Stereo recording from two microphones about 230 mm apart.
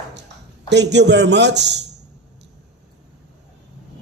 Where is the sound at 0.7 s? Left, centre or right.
Right.